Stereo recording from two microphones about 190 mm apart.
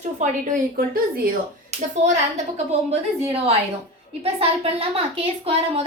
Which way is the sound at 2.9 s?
30° right (ahead or behind).